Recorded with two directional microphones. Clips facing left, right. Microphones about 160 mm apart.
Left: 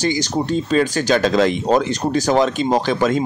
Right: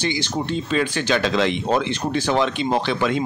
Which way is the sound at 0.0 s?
40° left (ahead or behind).